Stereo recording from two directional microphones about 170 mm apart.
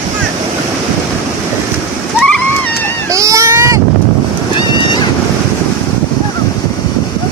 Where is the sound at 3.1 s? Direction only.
20° right (ahead or behind).